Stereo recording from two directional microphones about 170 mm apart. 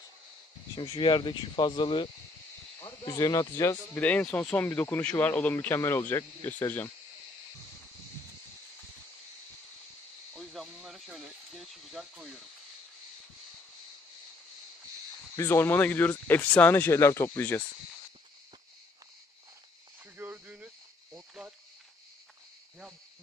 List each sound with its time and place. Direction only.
0.7 s speech: 30° left (ahead or behind)
4.0 s speech: 5° left (ahead or behind)
10.3 s a sound: centre (ahead or behind)
15.3 s speech: 15° left (ahead or behind)
20.2 s cricket: 10° right (ahead or behind)